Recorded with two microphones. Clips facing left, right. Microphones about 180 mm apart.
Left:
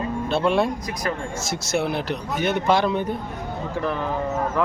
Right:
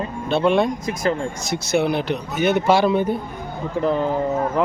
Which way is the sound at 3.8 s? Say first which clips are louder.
Right 6 dB; 20° right (ahead or behind).